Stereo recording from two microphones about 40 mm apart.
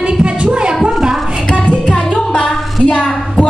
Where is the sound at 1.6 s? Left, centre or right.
Left.